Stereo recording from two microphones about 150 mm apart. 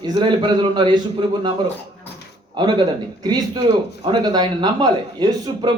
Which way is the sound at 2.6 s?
30° right (ahead or behind).